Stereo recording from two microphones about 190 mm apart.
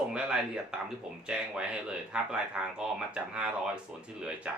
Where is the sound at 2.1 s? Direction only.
5° right (ahead or behind).